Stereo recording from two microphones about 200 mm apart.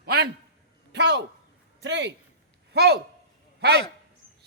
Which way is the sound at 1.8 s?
60° right (ahead or behind).